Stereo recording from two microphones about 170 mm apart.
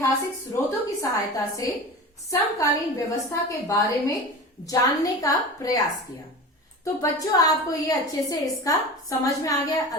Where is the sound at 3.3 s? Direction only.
20° left (ahead or behind).